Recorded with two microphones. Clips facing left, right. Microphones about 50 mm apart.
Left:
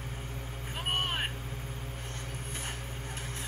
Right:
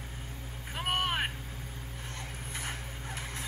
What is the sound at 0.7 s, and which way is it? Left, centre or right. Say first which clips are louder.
Vehicle: right 2 dB; right.